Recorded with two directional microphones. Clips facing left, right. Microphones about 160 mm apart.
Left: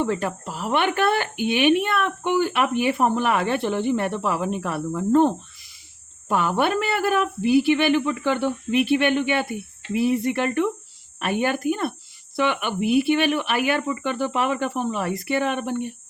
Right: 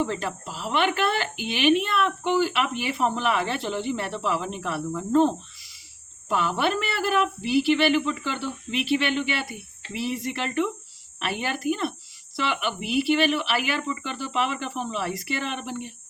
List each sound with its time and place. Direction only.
0.0 s speech: 55° left (ahead or behind)